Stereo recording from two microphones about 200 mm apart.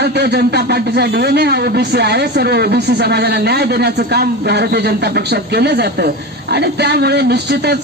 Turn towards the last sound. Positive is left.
turn(degrees=-55)  # may be behind; listen again after turning